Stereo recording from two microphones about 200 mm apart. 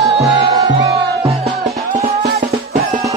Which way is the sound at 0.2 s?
25° right (ahead or behind).